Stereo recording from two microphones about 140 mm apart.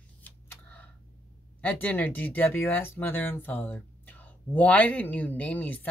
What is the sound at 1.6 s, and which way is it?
Speech, 10° left (ahead or behind).